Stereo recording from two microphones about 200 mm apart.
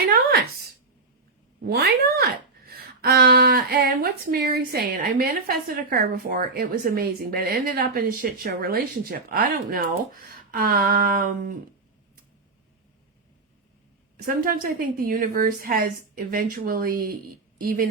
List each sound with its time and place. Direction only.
0.1 s a sound: 50° right (ahead or behind)
1.6 s speech: 55° right (ahead or behind)
14.3 s speech: 45° right (ahead or behind)